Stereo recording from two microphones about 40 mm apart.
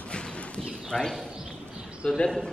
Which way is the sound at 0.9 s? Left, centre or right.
Left.